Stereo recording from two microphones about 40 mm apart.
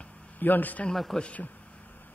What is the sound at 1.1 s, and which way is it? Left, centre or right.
Speech, centre.